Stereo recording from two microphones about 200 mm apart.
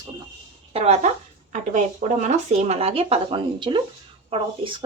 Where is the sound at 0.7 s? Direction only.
35° right (ahead or behind).